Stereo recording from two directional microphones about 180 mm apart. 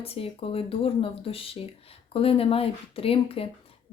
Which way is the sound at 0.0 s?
30° left (ahead or behind).